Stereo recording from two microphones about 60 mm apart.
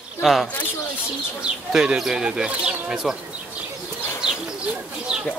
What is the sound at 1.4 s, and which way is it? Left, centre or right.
Speech, centre.